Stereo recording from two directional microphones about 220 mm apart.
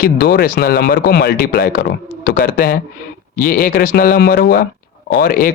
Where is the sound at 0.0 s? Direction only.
45° left (ahead or behind).